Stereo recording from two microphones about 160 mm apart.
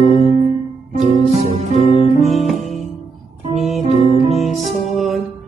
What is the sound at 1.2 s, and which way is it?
Music, 40° right (ahead or behind).